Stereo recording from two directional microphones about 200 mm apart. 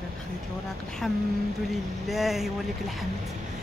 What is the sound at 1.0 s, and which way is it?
Speech, centre (ahead or behind).